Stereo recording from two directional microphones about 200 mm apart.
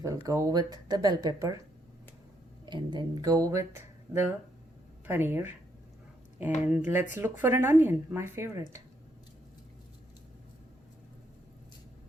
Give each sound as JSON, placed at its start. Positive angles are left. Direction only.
{"t": 0.0, "sound": "speech", "side_deg": -15}
{"t": 2.6, "sound": "speech", "side_deg": -20}
{"t": 6.7, "sound": "speech", "side_deg": -10}